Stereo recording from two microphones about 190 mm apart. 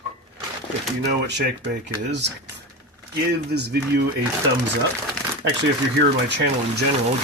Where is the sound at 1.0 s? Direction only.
65° right (ahead or behind).